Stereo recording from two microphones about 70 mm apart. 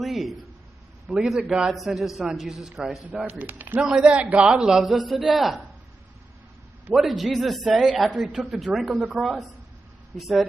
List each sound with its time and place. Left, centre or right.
0.0 s a man's voice: centre
3.3 s speech: right
3.8 s a man's voice: centre
6.9 s a man's voice: centre
7.7 s a man's voice: centre
8.5 s a man's voice: centre